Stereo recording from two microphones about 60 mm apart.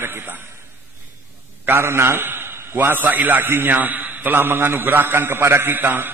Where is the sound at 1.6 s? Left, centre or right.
Right.